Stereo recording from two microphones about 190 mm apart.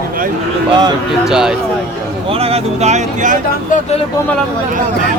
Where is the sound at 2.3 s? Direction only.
30° right (ahead or behind).